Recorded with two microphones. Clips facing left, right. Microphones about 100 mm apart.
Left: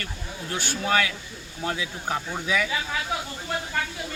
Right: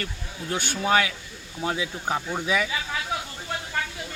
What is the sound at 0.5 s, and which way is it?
Speech, 20° right (ahead or behind).